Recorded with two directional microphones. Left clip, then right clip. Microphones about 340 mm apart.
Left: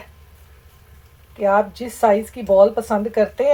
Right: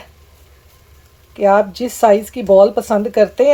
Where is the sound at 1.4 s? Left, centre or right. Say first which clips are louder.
Right 5 dB; right.